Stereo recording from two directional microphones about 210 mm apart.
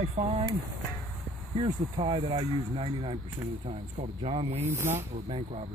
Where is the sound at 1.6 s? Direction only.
25° right (ahead or behind).